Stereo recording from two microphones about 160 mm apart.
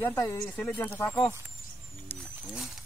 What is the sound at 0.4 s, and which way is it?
Speech, 5° left (ahead or behind).